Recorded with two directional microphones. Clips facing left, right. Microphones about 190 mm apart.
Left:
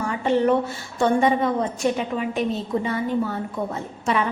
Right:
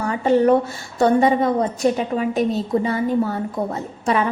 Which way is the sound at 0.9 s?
40° right (ahead or behind).